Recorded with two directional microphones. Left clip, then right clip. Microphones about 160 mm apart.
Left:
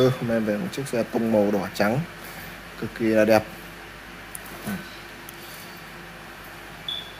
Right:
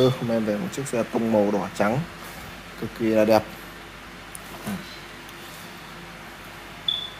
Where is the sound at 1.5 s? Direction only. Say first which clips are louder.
Even; 20° left (ahead or behind).